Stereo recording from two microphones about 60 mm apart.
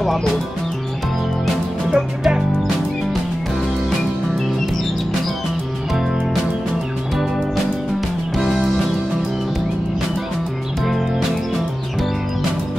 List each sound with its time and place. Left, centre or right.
0.0 s speech: centre
2.0 s speech: centre
8.4 s music: centre
10.9 s music: centre